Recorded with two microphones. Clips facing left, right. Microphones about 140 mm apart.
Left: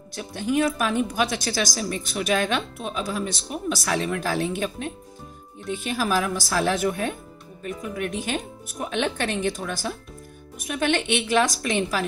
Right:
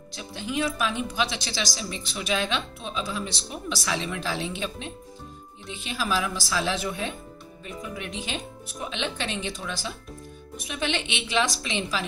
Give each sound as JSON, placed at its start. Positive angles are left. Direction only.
{"t": 0.1, "sound": "a woman's voice", "side_deg": 50}